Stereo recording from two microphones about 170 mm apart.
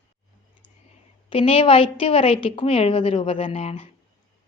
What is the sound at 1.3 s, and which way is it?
A woman's voice, 30° left (ahead or behind).